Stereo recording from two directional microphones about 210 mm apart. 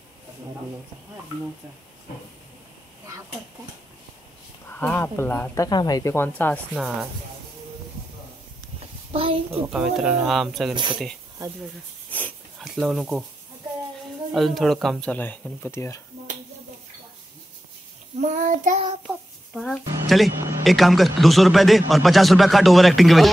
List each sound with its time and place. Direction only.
4.7 s speech: 10° left (ahead or behind)
9.1 s a woman's voice: 25° right (ahead or behind)
9.6 s a man's voice: centre (ahead or behind)
10.7 s speech: 20° right (ahead or behind)
12.1 s a sound: 10° left (ahead or behind)
12.6 s speech: centre (ahead or behind)
14.3 s a man's voice: centre (ahead or behind)
18.2 s child singing: 35° right (ahead or behind)
19.0 s child singing: centre (ahead or behind)
20.6 s a man's voice: centre (ahead or behind)